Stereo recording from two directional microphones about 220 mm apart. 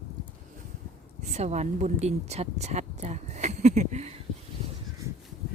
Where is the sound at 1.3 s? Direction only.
30° right (ahead or behind).